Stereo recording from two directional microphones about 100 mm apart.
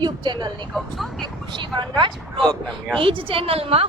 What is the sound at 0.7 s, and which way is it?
Speech, centre (ahead or behind).